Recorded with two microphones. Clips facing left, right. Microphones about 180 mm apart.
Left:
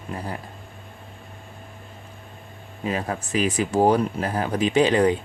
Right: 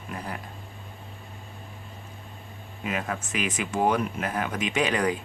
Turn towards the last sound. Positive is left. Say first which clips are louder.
# left 7 dB
turn(degrees=30)  # may be behind; listen again after turning